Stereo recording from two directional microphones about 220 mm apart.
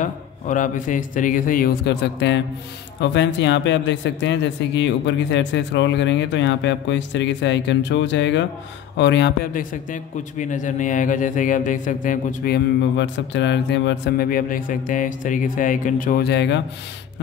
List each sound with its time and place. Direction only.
0.0 s speech: 35° left (ahead or behind); by 16.6 s 50° left (ahead or behind)